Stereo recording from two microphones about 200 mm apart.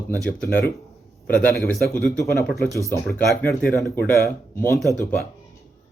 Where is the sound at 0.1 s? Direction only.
10° left (ahead or behind).